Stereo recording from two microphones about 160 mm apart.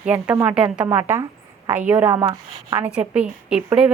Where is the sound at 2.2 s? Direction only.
35° right (ahead or behind).